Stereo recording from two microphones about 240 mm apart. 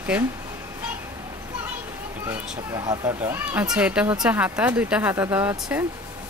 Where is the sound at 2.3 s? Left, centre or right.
Centre.